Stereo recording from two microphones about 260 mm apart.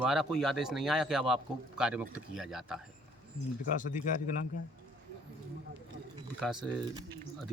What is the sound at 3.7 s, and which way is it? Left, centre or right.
Speech, left.